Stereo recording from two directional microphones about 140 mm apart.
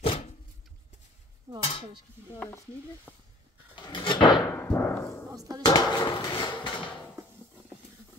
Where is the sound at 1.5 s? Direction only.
20° right (ahead or behind).